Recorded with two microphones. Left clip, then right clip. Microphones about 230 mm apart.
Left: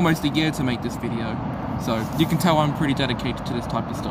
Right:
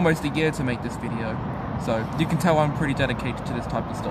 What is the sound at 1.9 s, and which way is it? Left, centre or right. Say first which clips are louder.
Speech: left 2 dB; centre.